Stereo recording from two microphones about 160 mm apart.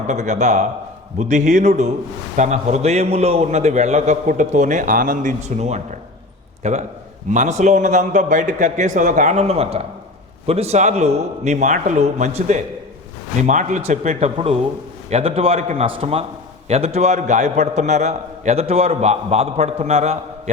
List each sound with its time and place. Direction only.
0.1 s a man's voice: 45° right (ahead or behind)